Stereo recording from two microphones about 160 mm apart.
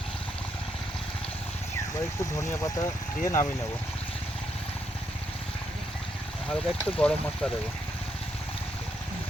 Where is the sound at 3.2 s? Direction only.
20° left (ahead or behind).